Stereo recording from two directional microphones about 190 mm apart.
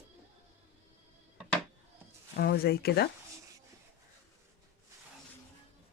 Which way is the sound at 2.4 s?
55° left (ahead or behind).